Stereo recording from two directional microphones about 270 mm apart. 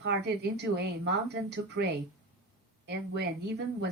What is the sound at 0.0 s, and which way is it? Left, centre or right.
Speech, right.